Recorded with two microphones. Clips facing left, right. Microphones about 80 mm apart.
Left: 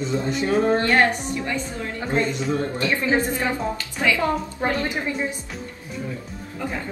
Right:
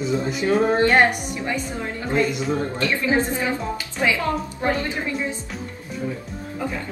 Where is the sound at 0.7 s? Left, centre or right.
Right.